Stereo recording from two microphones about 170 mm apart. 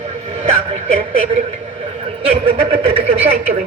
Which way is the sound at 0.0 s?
35° right (ahead or behind).